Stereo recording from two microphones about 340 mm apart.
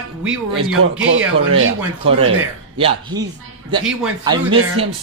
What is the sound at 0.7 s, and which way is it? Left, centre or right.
Speech, right.